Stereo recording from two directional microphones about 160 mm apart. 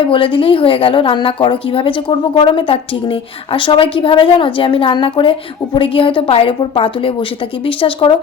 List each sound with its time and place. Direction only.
0.1 s a woman's voice: 35° left (ahead or behind)